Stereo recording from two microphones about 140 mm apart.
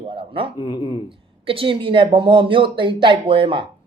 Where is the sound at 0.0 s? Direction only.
40° right (ahead or behind).